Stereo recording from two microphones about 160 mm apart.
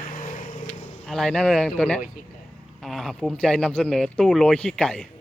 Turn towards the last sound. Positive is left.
turn(degrees=5)  # may be behind; listen again after turning